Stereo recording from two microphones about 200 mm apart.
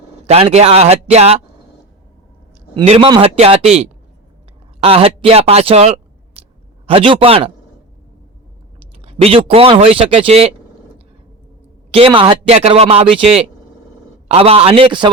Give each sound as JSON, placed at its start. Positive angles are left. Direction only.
{"t": 0.3, "sound": "a man's voice", "side_deg": -30}
{"t": 2.7, "sound": "speech", "side_deg": -25}
{"t": 9.0, "sound": "speech", "side_deg": -30}
{"t": 11.9, "sound": "speech", "side_deg": -25}